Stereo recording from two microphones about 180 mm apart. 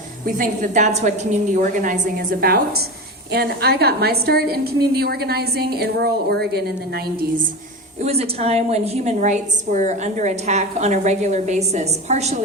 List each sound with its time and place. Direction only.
0.3 s a woman's voice: 45° right (ahead or behind)
8.0 s a woman's voice: 35° right (ahead or behind)